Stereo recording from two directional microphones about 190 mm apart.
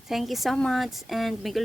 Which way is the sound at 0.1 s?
Centre (ahead or behind).